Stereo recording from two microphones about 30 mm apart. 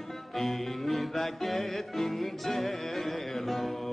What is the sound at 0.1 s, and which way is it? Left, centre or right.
Music, centre.